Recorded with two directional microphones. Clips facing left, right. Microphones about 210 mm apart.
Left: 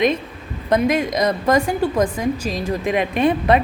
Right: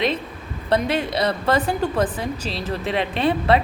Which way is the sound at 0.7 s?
10° left (ahead or behind).